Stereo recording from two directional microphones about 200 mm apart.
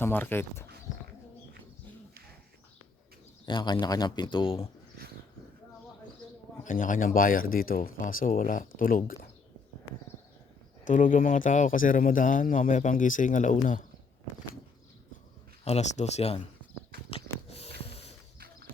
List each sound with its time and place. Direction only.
0.0 s speech: 10° left (ahead or behind)
3.4 s a man's voice: 20° left (ahead or behind)
6.7 s speech: 40° left (ahead or behind)
10.8 s speech: 40° left (ahead or behind)
15.6 s speech: 35° left (ahead or behind)
17.1 s a sound: 30° left (ahead or behind)